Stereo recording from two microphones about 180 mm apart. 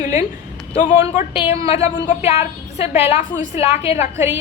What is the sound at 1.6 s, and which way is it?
A woman's voice, 35° left (ahead or behind).